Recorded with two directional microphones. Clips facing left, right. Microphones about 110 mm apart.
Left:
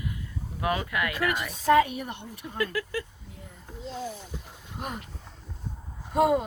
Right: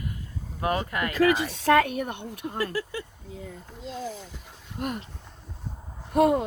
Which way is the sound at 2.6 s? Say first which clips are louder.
Left 1 dB; 30° right (ahead or behind).